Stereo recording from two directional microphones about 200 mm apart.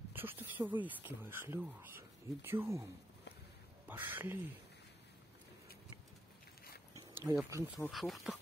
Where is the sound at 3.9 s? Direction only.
10° right (ahead or behind).